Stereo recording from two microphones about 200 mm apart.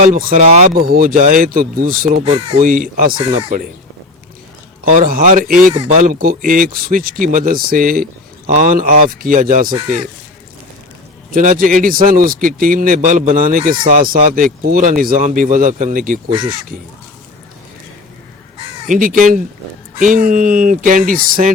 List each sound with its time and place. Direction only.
0.1 s speech: 45° right (ahead or behind)
0.3 s speech: 30° right (ahead or behind)
0.7 s speech: 45° right (ahead or behind)
4.9 s speech: 45° right (ahead or behind)
11.3 s speech: 45° right (ahead or behind)
16.3 s speech: 25° right (ahead or behind)
18.9 s speech: 40° right (ahead or behind)